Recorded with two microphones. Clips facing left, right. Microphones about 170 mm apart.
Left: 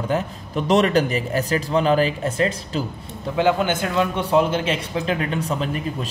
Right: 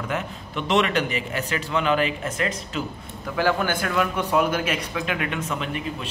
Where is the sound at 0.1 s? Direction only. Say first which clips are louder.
Left 7 dB; 40° left (ahead or behind).